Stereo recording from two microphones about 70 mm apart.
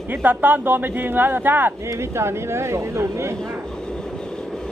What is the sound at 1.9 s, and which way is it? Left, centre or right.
Speech, right.